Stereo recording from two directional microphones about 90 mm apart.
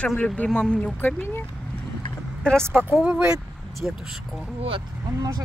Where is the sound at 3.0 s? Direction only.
10° right (ahead or behind).